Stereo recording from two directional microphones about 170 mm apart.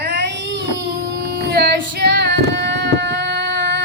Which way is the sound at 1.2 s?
70° right (ahead or behind).